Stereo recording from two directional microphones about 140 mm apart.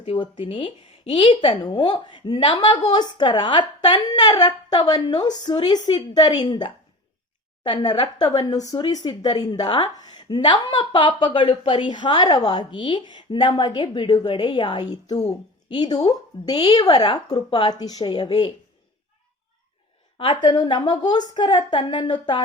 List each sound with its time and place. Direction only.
0.0 s a woman's voice: 40° left (ahead or behind)
20.1 s speech: 40° left (ahead or behind)